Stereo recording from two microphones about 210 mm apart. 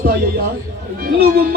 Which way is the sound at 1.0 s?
45° right (ahead or behind).